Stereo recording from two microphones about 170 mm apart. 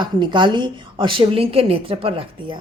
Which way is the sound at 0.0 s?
25° right (ahead or behind).